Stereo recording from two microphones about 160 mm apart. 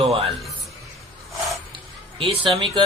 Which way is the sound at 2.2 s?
30° right (ahead or behind).